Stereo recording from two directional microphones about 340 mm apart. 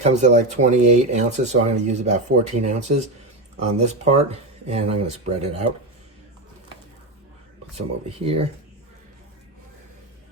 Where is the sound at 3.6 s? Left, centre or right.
Centre.